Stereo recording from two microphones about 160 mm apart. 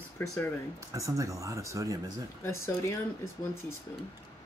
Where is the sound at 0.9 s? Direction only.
20° right (ahead or behind).